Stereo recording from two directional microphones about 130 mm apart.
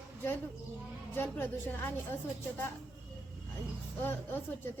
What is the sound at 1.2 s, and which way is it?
A woman's voice, 15° left (ahead or behind).